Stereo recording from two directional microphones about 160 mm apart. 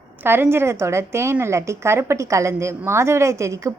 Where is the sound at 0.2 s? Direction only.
15° right (ahead or behind).